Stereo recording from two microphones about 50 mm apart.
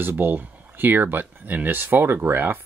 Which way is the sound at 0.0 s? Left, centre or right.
Right.